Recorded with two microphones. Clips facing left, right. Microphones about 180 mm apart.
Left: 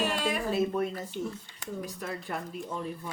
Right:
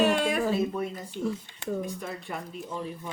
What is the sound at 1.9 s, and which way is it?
Speech, centre (ahead or behind).